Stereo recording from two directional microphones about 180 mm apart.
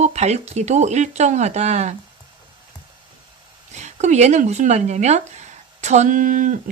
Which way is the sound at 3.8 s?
40° right (ahead or behind).